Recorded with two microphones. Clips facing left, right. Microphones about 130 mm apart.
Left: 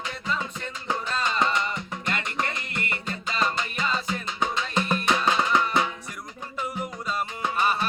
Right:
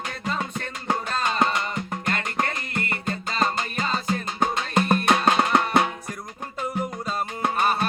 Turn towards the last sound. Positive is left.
turn(degrees=-50)  # may be behind; listen again after turning